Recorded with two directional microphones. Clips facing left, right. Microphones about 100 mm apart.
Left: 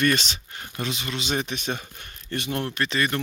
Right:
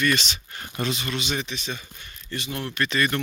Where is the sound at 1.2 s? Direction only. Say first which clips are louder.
Left 2 dB; 45° left (ahead or behind).